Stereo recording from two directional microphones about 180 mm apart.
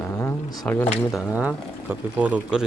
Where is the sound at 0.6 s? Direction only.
10° left (ahead or behind).